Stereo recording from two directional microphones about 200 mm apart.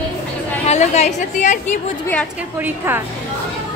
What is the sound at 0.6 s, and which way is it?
Speech, 35° left (ahead or behind).